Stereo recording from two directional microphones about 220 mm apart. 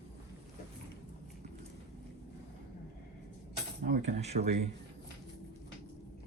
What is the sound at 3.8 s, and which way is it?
Speech, 30° right (ahead or behind).